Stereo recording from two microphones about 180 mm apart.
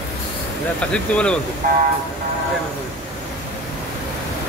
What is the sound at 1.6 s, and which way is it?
Speech, 55° right (ahead or behind).